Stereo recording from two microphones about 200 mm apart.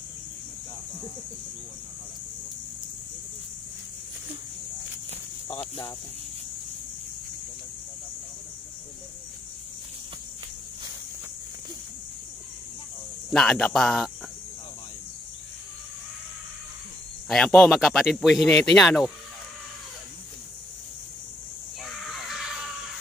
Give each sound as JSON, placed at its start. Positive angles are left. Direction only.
{"t": 5.6, "sound": "speech", "side_deg": 25}
{"t": 13.3, "sound": "speech", "side_deg": 5}
{"t": 17.3, "sound": "speech", "side_deg": 5}
{"t": 21.8, "sound": "crow", "side_deg": 0}